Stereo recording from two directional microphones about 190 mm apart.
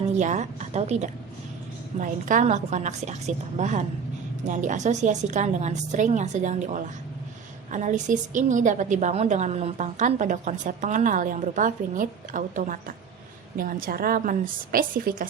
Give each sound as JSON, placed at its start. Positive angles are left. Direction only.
{"t": 0.2, "sound": "a woman's voice", "side_deg": -40}